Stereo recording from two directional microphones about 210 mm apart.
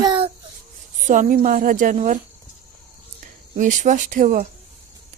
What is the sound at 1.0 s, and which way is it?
A woman's voice, 35° right (ahead or behind).